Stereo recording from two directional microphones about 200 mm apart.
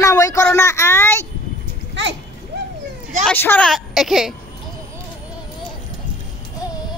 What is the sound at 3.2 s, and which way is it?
Speech, 10° left (ahead or behind).